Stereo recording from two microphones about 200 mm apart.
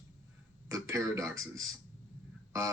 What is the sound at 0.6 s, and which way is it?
Speech, 15° right (ahead or behind).